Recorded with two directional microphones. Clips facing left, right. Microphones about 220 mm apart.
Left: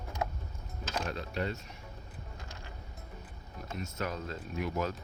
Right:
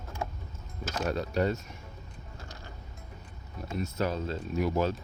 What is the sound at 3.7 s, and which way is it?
Speech, 35° right (ahead or behind).